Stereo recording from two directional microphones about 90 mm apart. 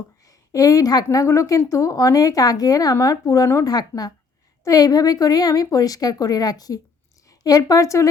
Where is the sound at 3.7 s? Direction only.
50° left (ahead or behind).